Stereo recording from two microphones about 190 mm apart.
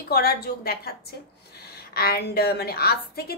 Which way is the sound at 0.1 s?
55° left (ahead or behind).